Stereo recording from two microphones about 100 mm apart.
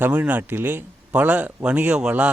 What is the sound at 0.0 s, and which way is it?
Speech, 20° right (ahead or behind).